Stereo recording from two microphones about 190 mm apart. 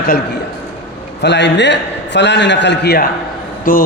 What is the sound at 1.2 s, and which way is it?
A man's voice, 65° left (ahead or behind).